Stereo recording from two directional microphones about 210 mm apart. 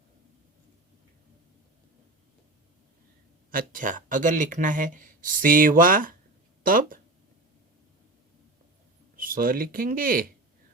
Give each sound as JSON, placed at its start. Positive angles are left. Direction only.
{"t": 3.5, "sound": "speech", "side_deg": -40}
{"t": 9.1, "sound": "speech", "side_deg": -40}